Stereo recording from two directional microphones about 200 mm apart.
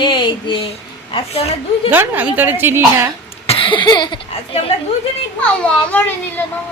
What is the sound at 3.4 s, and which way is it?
Speech, 30° left (ahead or behind).